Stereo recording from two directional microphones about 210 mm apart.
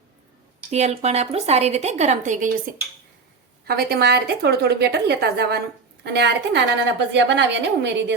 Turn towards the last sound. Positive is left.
turn(degrees=-55)  # may be behind; listen again after turning